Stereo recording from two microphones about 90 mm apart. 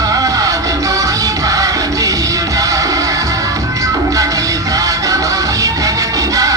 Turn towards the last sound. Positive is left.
turn(degrees=-40)  # may be behind; listen again after turning